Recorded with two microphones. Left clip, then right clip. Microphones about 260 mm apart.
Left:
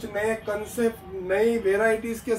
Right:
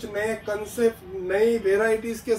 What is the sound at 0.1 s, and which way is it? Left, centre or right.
Speech, left.